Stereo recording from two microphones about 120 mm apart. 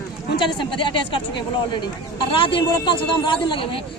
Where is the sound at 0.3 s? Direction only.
40° left (ahead or behind).